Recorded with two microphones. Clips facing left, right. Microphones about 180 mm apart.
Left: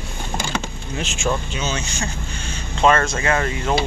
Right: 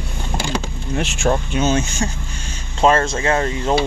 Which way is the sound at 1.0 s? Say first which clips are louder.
Right 4 dB; 60° right (ahead or behind).